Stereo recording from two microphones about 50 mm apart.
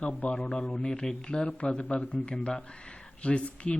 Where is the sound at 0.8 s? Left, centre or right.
Centre.